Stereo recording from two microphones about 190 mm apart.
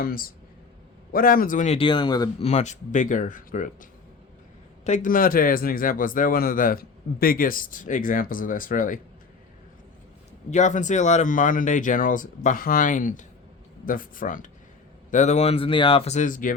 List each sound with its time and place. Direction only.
0.0 s speech: 50° left (ahead or behind); by 2.3 s 20° left (ahead or behind)
2.4 s speech: 35° left (ahead or behind)
4.9 s speech: 50° left (ahead or behind)
10.5 s speech: 40° left (ahead or behind)